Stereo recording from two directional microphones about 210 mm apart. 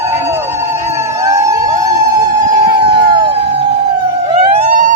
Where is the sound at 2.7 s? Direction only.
20° right (ahead or behind).